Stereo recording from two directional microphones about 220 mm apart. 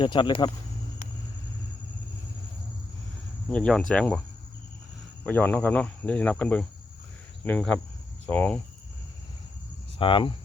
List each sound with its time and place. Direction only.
0.0 s speech: 20° left (ahead or behind)
3.5 s speech: 5° left (ahead or behind)
5.2 s speech: 10° left (ahead or behind)
10.0 s speech: 25° left (ahead or behind)